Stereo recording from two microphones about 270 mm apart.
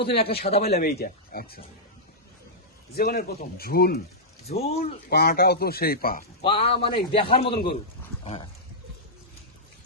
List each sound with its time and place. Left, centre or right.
0.3 s speech: left
2.9 s speech: left
4.4 s speech: left
6.4 s a man's voice: centre